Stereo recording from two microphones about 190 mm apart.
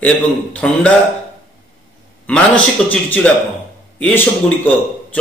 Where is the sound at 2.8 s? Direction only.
10° left (ahead or behind).